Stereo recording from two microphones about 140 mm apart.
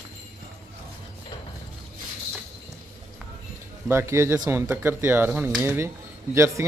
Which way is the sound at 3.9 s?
20° right (ahead or behind).